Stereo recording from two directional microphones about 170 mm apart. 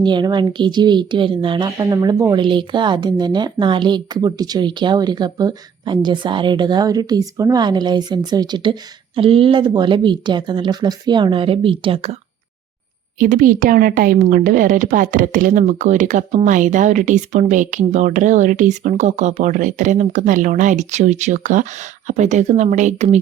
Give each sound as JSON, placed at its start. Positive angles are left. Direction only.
{"t": 0.0, "sound": "a woman's voice", "side_deg": -25}
{"t": 13.1, "sound": "a woman's voice", "side_deg": -55}